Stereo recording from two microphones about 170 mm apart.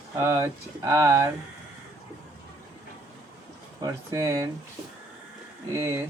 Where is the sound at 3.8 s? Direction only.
20° right (ahead or behind).